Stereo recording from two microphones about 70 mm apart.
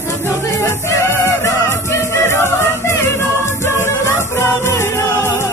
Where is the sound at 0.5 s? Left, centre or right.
Left.